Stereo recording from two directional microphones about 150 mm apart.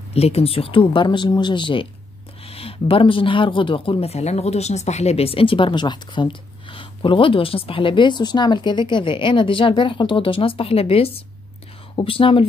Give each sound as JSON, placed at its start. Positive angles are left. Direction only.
{"t": 0.1, "sound": "speech", "side_deg": 40}